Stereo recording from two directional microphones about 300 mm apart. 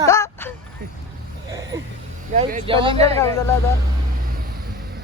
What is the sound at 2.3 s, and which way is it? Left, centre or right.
Speech, right.